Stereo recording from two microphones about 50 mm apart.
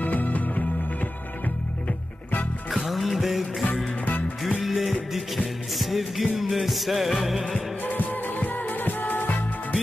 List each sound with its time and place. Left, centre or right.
0.0 s music: left
2.9 s music: centre
7.8 s music: left